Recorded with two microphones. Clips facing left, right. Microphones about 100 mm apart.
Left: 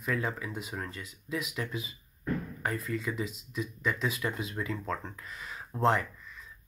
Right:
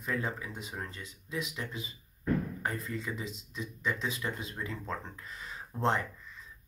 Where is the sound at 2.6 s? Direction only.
30° right (ahead or behind).